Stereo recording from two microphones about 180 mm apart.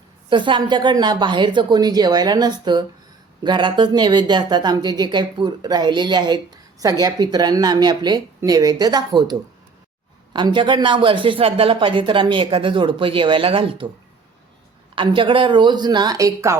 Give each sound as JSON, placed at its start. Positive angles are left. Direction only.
{"t": 0.3, "sound": "speech", "side_deg": -25}
{"t": 14.9, "sound": "speech", "side_deg": -30}